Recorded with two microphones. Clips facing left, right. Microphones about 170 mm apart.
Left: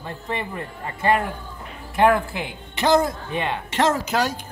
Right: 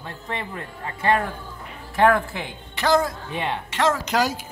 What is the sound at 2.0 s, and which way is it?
Speech, 15° left (ahead or behind).